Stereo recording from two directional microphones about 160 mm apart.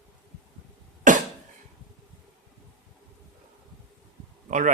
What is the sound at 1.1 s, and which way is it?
Cough, 50° right (ahead or behind).